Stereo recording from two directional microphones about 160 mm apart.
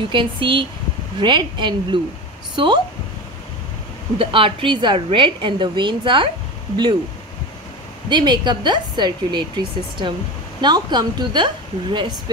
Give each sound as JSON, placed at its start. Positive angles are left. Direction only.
{"t": 0.1, "sound": "a woman's voice", "side_deg": -30}
{"t": 4.2, "sound": "a woman's voice", "side_deg": -35}
{"t": 8.1, "sound": "a woman's voice", "side_deg": -25}